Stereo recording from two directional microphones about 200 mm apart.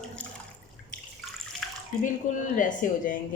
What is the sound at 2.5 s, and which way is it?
Speech, 40° left (ahead or behind).